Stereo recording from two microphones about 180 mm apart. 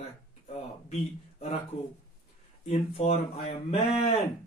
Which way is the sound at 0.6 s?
35° left (ahead or behind).